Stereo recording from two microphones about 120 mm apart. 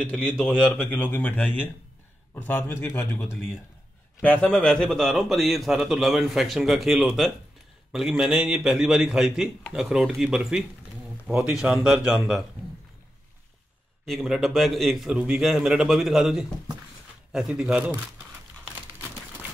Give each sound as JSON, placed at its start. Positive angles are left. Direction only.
{"t": 0.1, "sound": "speech", "side_deg": 10}
{"t": 0.7, "sound": "speech", "side_deg": 15}
{"t": 4.2, "sound": "a man's voice", "side_deg": 10}
{"t": 11.6, "sound": "a man's voice", "side_deg": -5}
{"t": 14.0, "sound": "a man's voice", "side_deg": 0}